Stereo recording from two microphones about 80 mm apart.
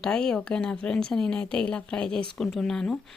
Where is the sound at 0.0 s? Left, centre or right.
Centre.